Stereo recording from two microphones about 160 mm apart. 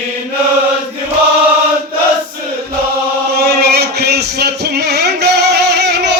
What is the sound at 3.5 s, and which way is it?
Music, 90° right.